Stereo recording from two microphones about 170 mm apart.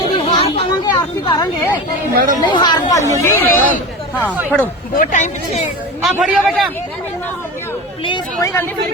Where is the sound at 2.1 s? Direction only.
55° right (ahead or behind).